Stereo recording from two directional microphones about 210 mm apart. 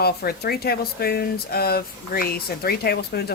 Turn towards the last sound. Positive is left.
turn(degrees=50)  # may be behind; listen again after turning